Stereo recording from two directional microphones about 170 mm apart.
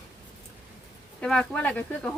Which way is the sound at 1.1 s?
5° left (ahead or behind).